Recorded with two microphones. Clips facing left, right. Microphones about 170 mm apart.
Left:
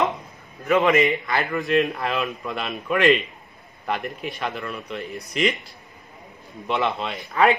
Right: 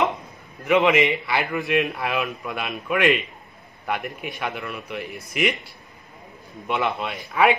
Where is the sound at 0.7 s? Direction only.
15° right (ahead or behind).